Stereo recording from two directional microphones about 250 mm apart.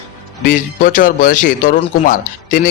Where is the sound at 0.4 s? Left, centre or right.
Left.